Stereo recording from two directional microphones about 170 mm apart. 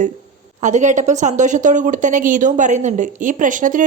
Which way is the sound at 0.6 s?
45° right (ahead or behind).